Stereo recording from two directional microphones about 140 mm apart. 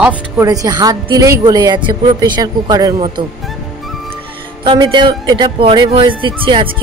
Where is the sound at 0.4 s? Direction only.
25° right (ahead or behind).